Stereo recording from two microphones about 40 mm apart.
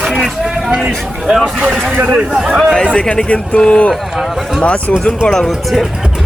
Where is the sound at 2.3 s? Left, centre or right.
Centre.